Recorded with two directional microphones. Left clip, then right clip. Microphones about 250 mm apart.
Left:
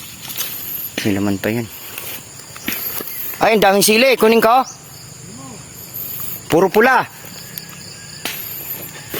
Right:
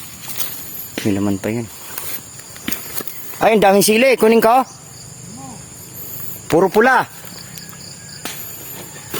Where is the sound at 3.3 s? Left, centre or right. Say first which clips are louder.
Right 1 dB; centre.